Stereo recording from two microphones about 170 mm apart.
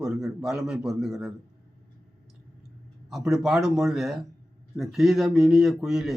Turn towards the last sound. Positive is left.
turn(degrees=0)  # may be behind; listen again after turning